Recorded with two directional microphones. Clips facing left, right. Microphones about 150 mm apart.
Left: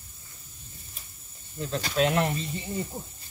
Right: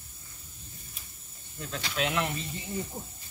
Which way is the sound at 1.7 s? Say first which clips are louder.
Left 7 dB; 40° left (ahead or behind).